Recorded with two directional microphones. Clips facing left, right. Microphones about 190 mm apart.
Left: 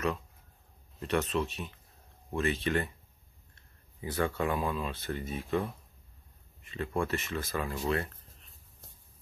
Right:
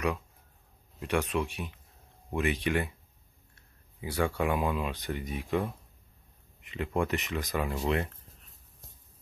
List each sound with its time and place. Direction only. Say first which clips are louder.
0.9 s speech: right 1 dB; 10° right (ahead or behind)